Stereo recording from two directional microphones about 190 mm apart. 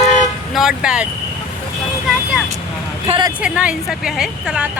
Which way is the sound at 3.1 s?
20° right (ahead or behind).